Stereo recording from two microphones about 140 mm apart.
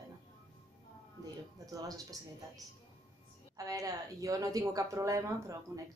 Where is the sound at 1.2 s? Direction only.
25° right (ahead or behind).